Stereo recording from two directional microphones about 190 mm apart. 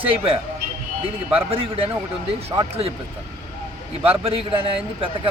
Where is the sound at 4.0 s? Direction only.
30° right (ahead or behind).